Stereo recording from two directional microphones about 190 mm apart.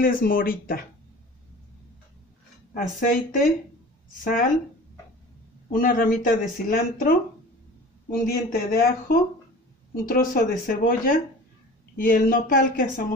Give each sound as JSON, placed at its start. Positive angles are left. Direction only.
{"t": 0.0, "sound": "speech", "side_deg": 50}
{"t": 2.7, "sound": "speech", "side_deg": 45}
{"t": 5.7, "sound": "speech", "side_deg": 45}